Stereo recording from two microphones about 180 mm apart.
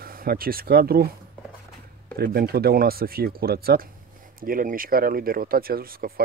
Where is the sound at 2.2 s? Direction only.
60° right (ahead or behind).